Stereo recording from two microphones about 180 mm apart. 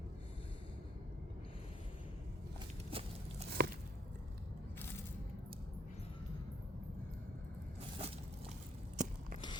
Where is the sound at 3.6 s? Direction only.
60° right (ahead or behind).